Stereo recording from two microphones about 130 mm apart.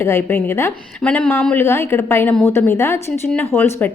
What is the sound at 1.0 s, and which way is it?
A woman's voice, 10° left (ahead or behind).